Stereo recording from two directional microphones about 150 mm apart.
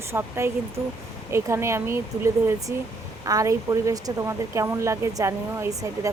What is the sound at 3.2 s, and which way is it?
A woman's voice, 20° right (ahead or behind).